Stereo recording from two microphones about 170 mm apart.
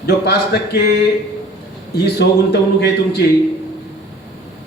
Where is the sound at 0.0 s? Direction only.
65° left (ahead or behind).